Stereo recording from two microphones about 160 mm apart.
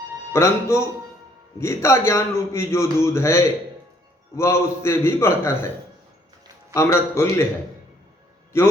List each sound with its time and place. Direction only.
0.3 s a man's voice: 15° left (ahead or behind)
6.7 s a man's voice: 15° left (ahead or behind)